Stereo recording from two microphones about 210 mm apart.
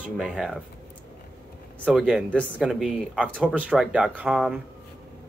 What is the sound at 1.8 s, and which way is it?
Speech, 5° right (ahead or behind).